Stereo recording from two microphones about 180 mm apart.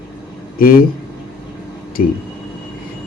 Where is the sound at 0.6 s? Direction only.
55° left (ahead or behind).